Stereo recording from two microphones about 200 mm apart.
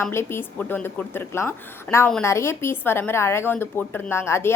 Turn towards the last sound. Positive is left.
turn(degrees=10)  # may be behind; listen again after turning